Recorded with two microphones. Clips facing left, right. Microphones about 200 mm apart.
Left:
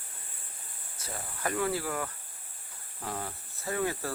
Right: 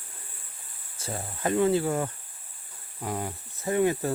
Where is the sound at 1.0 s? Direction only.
25° right (ahead or behind).